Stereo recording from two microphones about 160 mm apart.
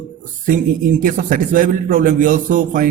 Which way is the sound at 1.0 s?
55° right (ahead or behind).